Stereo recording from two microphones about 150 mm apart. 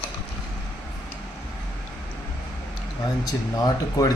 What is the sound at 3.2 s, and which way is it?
Speech, 25° left (ahead or behind).